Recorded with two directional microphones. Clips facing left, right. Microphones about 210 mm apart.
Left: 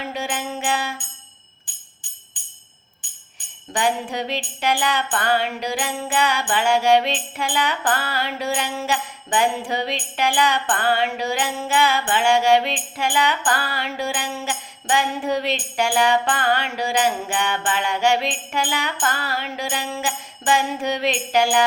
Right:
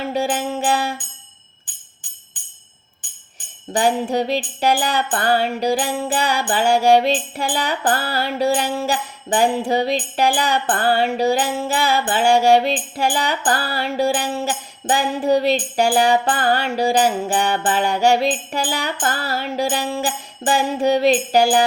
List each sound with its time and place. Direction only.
0.0 s music: 35° right (ahead or behind)
2.3 s tambourine: 45° right (ahead or behind)
3.3 s music: 35° right (ahead or behind)